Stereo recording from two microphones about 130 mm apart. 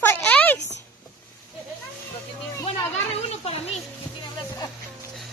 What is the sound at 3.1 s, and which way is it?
Speech, 50° left (ahead or behind).